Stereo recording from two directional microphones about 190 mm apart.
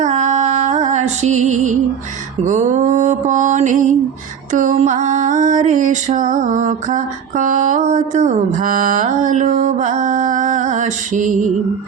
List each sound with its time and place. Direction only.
0.0 s music: 40° right (ahead or behind)
2.4 s mantra: 40° right (ahead or behind)